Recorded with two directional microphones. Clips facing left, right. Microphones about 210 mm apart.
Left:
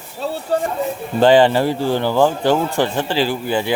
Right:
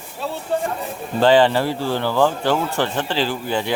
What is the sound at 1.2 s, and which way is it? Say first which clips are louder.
A man's voice: left 3 dB; 15° left (ahead or behind).